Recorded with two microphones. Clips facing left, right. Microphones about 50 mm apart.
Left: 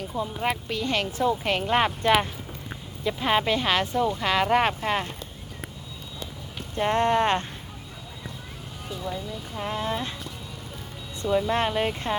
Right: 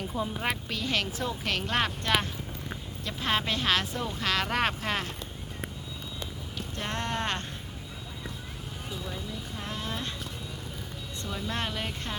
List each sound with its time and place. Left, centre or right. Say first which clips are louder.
0.2 s speech: left 4 dB; centre
6.7 s speech: left 11 dB; left
9.6 s speech: left 8 dB; left
11.2 s speech: left 11 dB; left